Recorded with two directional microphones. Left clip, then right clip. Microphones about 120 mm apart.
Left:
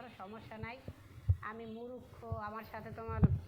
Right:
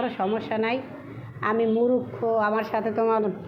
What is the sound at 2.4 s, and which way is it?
Speech, 10° right (ahead or behind).